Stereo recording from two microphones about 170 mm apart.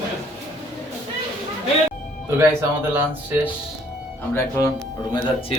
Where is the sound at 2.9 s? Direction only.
10° right (ahead or behind).